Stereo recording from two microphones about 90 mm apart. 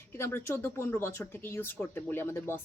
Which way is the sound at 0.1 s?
25° left (ahead or behind).